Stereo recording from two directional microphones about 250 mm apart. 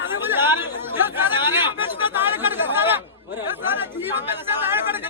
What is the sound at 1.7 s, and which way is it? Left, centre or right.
Chatter, centre.